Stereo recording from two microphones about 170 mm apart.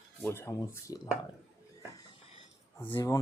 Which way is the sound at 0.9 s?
20° right (ahead or behind).